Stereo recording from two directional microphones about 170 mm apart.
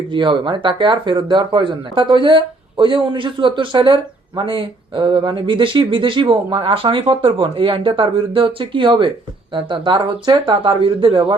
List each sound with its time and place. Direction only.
0.1 s speech: 30° right (ahead or behind)